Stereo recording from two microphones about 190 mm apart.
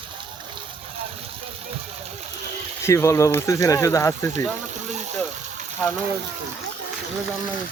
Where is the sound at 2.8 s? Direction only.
15° left (ahead or behind).